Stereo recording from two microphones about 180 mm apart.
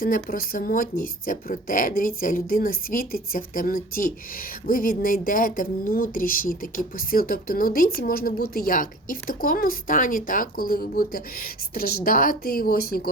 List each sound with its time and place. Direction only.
0.0 s a woman's voice: 55° left (ahead or behind)